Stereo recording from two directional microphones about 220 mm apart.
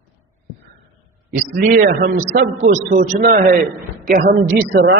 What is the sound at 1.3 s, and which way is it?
A man's voice, 40° right (ahead or behind).